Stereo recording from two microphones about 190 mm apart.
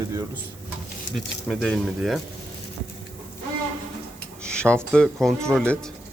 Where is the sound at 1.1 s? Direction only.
Centre (ahead or behind).